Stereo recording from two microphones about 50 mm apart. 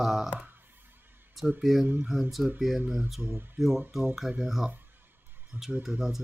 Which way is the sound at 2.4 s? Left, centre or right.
Right.